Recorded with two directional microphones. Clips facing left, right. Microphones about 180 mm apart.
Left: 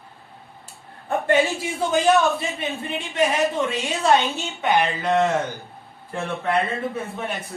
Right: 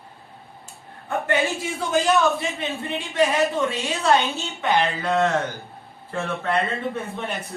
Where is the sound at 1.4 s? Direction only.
Centre (ahead or behind).